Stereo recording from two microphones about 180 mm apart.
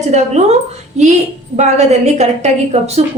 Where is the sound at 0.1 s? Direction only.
40° right (ahead or behind).